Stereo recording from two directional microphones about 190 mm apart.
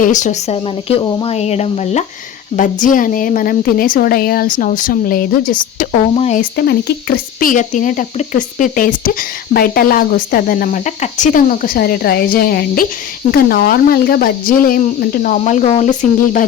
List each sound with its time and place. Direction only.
0.0 s speech: 40° left (ahead or behind)
6.1 s speech: 35° left (ahead or behind)
6.6 s speech: 55° left (ahead or behind)